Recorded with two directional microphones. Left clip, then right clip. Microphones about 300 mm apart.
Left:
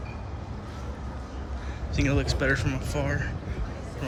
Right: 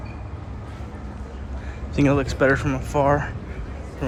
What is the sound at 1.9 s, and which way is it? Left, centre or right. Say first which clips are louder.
Speech: right 7 dB; centre.